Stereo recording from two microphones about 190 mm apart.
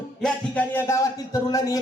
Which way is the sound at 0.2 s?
10° left (ahead or behind).